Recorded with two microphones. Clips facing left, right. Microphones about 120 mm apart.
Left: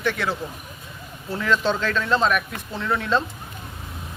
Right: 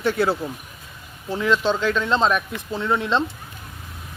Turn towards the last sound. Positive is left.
turn(degrees=-25)  # may be behind; listen again after turning